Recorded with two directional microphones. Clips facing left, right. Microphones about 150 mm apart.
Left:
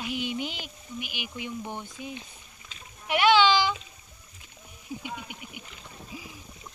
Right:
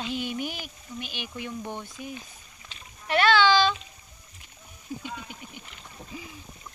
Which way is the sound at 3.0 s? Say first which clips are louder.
Even; 15° left (ahead or behind).